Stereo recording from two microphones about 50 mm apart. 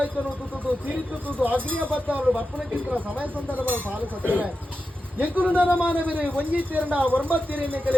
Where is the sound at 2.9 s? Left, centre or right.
Right.